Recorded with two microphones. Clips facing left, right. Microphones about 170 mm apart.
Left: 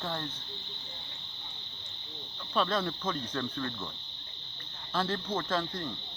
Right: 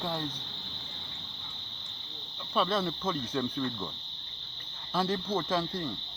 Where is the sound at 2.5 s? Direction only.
5° right (ahead or behind).